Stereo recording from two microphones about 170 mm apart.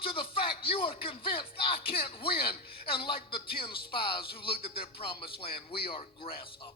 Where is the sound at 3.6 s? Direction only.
30° left (ahead or behind).